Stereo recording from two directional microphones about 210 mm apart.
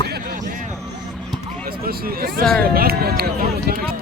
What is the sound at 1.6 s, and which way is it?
Speech, 45° right (ahead or behind).